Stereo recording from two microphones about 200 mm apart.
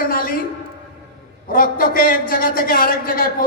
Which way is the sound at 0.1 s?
45° left (ahead or behind).